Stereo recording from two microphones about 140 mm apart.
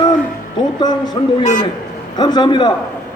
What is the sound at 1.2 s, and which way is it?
A man's voice, 35° left (ahead or behind).